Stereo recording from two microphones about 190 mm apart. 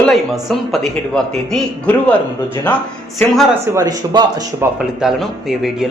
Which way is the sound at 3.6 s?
15° right (ahead or behind).